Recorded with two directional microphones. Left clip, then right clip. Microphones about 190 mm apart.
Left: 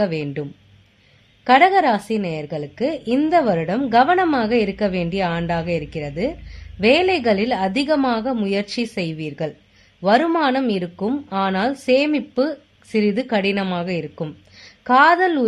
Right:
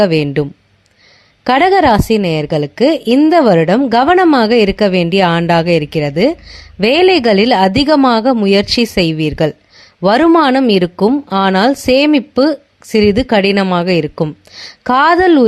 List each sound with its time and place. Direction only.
0.0 s a woman's voice: 40° right (ahead or behind)
1.5 s a woman's voice: 40° right (ahead or behind)